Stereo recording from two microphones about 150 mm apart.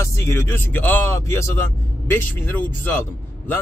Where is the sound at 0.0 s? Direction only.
20° left (ahead or behind).